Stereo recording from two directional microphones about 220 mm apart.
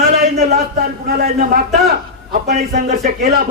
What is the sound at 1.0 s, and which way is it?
A man's voice, 40° right (ahead or behind).